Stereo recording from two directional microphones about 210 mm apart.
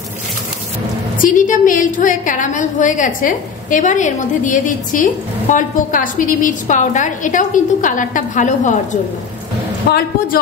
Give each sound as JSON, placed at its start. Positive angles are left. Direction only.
{"t": 1.2, "sound": "a woman's voice", "side_deg": 40}
{"t": 9.8, "sound": "a woman's voice", "side_deg": 45}